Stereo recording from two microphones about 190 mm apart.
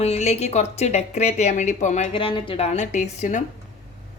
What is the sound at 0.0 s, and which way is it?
Speech, 35° left (ahead or behind).